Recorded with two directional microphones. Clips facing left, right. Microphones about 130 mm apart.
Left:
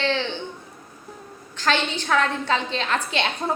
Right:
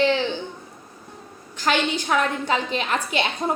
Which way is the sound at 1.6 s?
10° right (ahead or behind).